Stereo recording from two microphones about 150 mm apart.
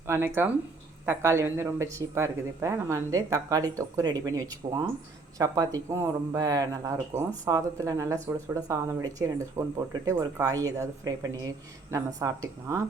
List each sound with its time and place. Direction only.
0.1 s speech: 15° right (ahead or behind)